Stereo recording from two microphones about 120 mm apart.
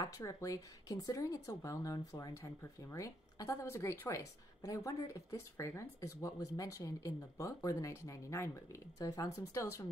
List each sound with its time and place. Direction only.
0.0 s a woman's voice: 25° left (ahead or behind)